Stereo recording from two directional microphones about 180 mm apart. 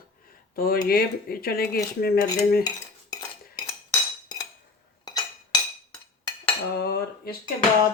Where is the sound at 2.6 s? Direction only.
20° left (ahead or behind).